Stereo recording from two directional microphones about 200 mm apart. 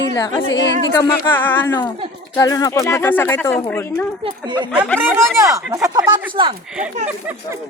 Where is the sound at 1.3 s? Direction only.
10° left (ahead or behind).